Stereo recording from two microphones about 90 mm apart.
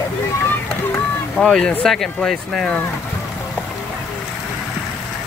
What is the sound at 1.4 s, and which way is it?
Speech, 5° left (ahead or behind).